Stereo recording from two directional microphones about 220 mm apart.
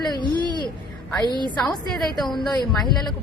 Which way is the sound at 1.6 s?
Centre (ahead or behind).